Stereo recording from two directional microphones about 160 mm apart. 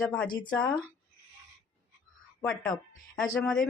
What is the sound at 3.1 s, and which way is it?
Speech, centre (ahead or behind).